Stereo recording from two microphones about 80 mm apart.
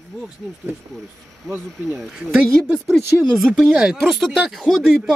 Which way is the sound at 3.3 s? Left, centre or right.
Centre.